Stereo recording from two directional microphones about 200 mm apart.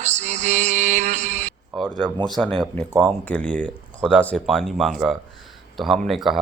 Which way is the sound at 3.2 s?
10° left (ahead or behind).